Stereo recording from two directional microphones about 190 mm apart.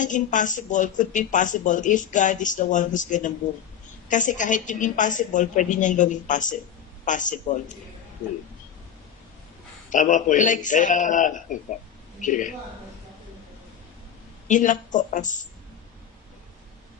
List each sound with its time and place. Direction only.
0.0 s speech: 40° left (ahead or behind)
9.8 s a man's voice: 40° left (ahead or behind)
14.5 s a man's voice: 40° left (ahead or behind)